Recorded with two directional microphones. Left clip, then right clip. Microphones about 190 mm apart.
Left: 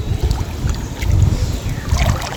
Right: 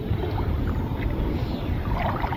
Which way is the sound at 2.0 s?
45° left (ahead or behind).